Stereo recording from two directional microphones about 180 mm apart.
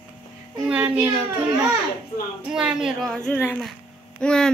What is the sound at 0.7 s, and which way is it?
Speech, 10° right (ahead or behind).